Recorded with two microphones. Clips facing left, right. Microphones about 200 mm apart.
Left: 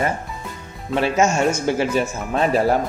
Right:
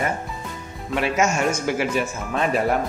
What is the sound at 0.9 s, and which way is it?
Speech, 30° left (ahead or behind).